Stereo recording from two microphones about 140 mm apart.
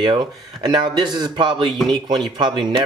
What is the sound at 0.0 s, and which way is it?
Speech, 30° right (ahead or behind).